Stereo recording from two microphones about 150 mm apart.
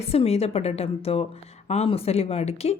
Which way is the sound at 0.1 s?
40° left (ahead or behind).